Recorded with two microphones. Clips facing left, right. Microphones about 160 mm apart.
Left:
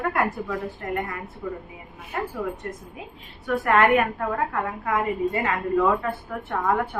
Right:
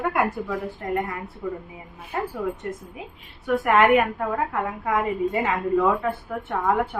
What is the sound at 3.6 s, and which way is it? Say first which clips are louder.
A woman's voice: right 1 dB; 15° right (ahead or behind).